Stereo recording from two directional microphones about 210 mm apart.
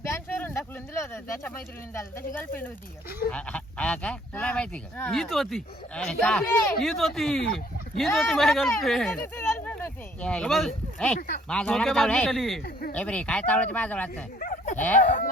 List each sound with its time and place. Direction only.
0.0 s a sound: 10° left (ahead or behind)
3.3 s speech: 5° left (ahead or behind)
8.4 s speech: centre (ahead or behind)
14.3 s dog: 40° left (ahead or behind)
14.9 s speech: 40° left (ahead or behind)